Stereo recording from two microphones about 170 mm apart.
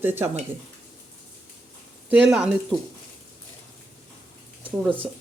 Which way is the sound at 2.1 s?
5° right (ahead or behind).